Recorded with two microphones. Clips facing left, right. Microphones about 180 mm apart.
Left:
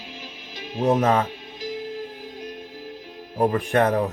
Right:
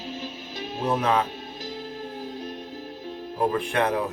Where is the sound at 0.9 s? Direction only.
45° left (ahead or behind).